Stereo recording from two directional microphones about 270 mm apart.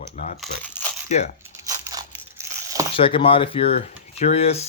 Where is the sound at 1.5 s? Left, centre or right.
Centre.